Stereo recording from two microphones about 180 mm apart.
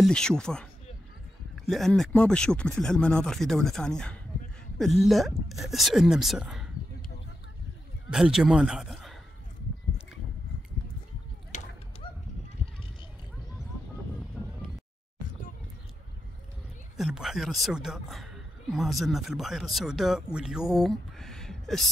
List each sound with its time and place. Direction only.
0.0 s speech: 5° left (ahead or behind)
8.1 s a man's voice: centre (ahead or behind)
11.5 s a sound: 40° left (ahead or behind)
16.9 s speech: centre (ahead or behind)